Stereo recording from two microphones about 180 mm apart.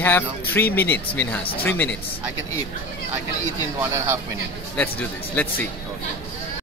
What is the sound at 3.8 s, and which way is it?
Speech, 15° right (ahead or behind).